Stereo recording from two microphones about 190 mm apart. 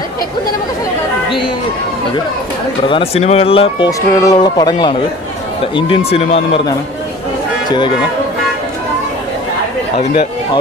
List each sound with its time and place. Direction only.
2.9 s speech: 30° left (ahead or behind)
9.9 s speech: 35° left (ahead or behind)